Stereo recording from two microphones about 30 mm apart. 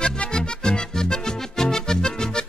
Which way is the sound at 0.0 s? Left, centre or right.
Left.